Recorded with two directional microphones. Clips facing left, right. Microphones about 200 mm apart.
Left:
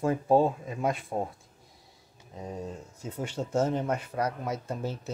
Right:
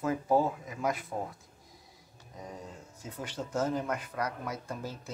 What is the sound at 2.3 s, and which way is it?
Speech, 25° left (ahead or behind).